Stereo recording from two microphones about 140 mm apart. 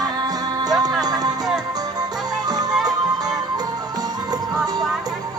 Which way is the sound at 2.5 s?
30° right (ahead or behind).